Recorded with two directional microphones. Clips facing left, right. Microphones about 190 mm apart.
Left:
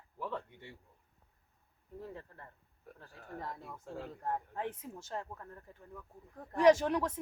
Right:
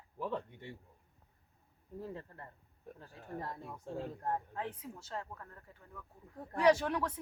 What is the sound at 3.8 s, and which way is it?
Speech, 20° right (ahead or behind).